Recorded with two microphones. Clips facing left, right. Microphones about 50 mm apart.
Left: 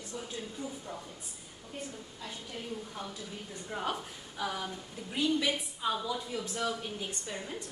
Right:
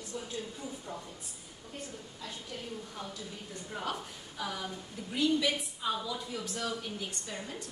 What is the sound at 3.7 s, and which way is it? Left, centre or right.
A woman's voice, centre.